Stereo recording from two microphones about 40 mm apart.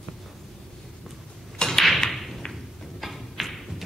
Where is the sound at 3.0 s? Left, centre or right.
Centre.